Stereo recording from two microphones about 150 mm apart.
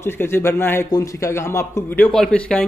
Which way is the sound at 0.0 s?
15° left (ahead or behind).